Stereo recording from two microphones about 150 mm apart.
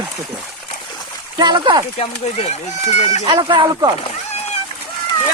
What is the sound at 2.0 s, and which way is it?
Speech, 45° left (ahead or behind).